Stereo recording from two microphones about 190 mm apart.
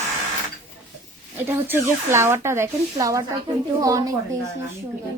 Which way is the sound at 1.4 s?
10° right (ahead or behind).